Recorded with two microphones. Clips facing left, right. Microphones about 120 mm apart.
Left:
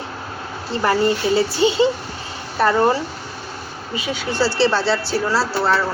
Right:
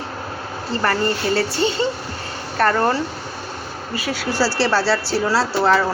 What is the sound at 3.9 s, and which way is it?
Speech, 5° right (ahead or behind).